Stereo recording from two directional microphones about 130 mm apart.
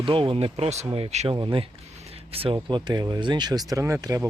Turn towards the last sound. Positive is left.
turn(degrees=-25)  # may be behind; listen again after turning